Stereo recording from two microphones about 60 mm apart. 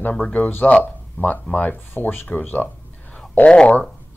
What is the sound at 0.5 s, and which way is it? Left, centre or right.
Speech, left.